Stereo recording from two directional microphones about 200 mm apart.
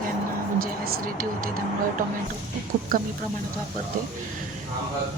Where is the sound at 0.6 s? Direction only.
45° right (ahead or behind).